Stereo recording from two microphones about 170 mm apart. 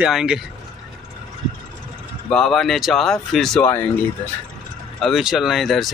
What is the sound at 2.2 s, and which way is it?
Speech, 5° left (ahead or behind).